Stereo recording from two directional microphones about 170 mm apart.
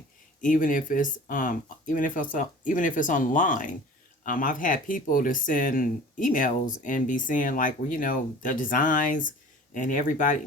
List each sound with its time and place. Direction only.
0.4 s speech: 50° left (ahead or behind)